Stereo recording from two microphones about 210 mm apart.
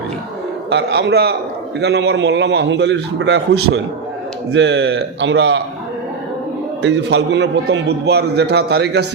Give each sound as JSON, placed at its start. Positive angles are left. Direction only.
{"t": 0.7, "sound": "a man's voice", "side_deg": -55}
{"t": 6.8, "sound": "a man's voice", "side_deg": -55}